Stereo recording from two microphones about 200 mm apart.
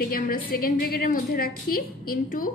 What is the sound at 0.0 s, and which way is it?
A woman's voice, 50° left (ahead or behind).